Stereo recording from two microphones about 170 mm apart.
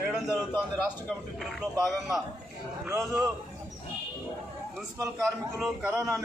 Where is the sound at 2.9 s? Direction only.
20° right (ahead or behind).